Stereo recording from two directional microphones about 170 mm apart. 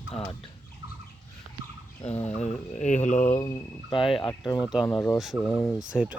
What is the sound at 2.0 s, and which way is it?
Fowl, 40° left (ahead or behind).